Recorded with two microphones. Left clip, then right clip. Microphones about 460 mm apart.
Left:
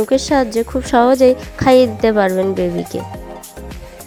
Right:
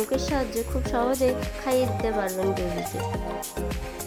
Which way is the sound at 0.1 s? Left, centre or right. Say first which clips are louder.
Left 12 dB; centre.